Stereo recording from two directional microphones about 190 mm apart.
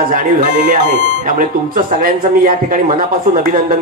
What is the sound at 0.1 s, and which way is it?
Speech, 45° right (ahead or behind).